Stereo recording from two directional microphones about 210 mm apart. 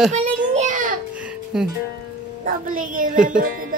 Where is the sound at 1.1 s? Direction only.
5° right (ahead or behind).